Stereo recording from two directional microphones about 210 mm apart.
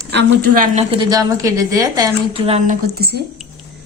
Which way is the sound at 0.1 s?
50° right (ahead or behind).